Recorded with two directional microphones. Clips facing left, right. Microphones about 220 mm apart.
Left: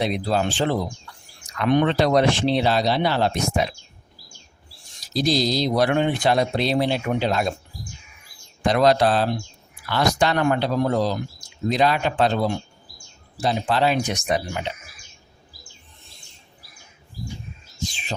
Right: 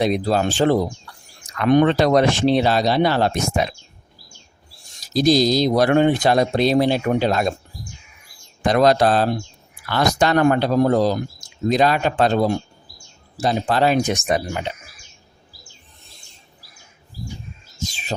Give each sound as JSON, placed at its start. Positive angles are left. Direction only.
{"t": 0.0, "sound": "speech", "side_deg": -45}
{"t": 5.1, "sound": "speech", "side_deg": -45}
{"t": 8.6, "sound": "speech", "side_deg": -45}
{"t": 17.8, "sound": "heart murmur", "side_deg": -40}